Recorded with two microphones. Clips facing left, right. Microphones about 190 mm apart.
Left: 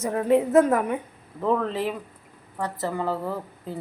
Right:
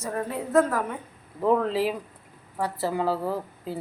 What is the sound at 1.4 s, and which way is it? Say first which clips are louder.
A woman's voice: right 2 dB; 10° right (ahead or behind).